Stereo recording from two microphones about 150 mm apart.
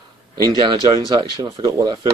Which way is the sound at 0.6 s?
25° right (ahead or behind).